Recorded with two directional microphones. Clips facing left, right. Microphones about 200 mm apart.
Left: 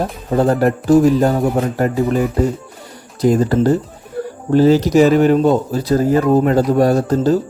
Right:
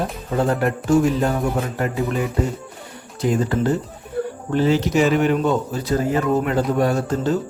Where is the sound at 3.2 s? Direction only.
40° left (ahead or behind).